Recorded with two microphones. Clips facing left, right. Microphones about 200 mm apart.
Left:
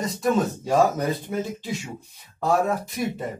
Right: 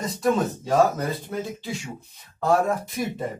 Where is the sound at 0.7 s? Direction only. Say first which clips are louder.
Right 1 dB; 15° left (ahead or behind).